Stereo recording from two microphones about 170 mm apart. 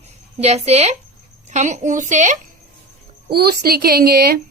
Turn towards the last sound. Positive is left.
turn(degrees=-65)  # may be behind; listen again after turning